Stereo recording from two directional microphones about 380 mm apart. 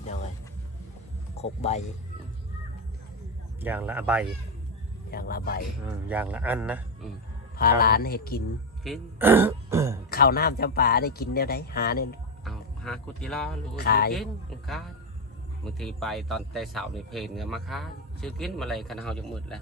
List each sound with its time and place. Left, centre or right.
1.4 s speech: centre
3.6 s speech: centre
5.1 s a man's voice: left
6.1 s speech: centre
7.6 s a man's voice: left
8.8 s speech: centre
10.1 s a man's voice: left
12.5 s speech: centre
13.7 s a man's voice: left
15.8 s speech: centre